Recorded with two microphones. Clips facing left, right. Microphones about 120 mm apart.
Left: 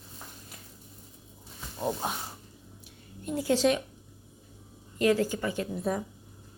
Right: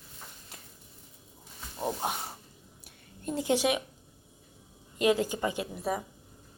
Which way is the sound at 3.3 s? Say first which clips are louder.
Left 2 dB; 15° right (ahead or behind).